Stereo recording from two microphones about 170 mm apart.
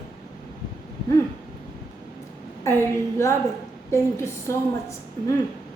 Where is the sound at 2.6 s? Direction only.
15° left (ahead or behind).